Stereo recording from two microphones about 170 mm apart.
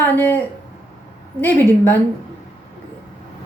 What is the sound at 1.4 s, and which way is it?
Speech, 10° left (ahead or behind).